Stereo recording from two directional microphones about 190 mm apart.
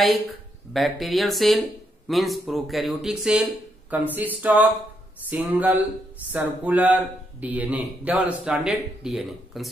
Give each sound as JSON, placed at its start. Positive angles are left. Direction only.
{"t": 0.7, "sound": "a man's voice", "side_deg": 0}